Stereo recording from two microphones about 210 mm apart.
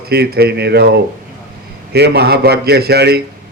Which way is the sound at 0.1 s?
50° right (ahead or behind).